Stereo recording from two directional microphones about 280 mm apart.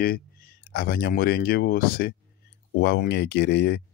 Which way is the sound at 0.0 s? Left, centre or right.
Left.